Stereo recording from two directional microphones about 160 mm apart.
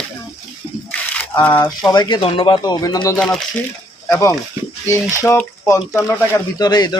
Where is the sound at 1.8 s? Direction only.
25° left (ahead or behind).